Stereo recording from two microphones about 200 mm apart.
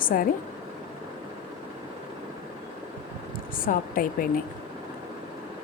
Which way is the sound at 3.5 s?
45° left (ahead or behind).